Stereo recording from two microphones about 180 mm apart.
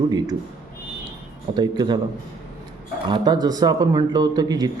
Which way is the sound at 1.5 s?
25° right (ahead or behind).